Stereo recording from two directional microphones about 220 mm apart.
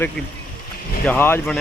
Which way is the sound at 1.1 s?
10° left (ahead or behind).